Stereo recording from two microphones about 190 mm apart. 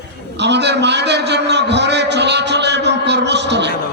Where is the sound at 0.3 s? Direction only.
65° right (ahead or behind).